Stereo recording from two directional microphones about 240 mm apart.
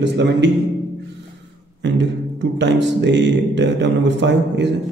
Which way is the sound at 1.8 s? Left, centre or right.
Right.